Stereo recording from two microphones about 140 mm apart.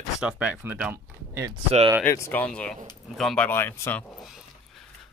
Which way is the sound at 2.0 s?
15° left (ahead or behind).